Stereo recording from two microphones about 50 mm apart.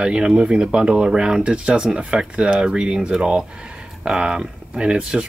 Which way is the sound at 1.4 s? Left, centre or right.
Right.